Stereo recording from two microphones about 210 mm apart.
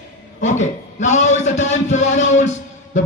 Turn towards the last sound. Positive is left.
turn(degrees=35)  # may be behind; listen again after turning